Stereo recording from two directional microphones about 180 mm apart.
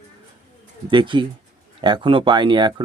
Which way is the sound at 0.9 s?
25° right (ahead or behind).